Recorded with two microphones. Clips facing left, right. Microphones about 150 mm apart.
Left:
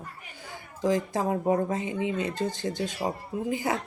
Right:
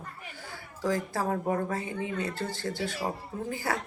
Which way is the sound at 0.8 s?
20° left (ahead or behind).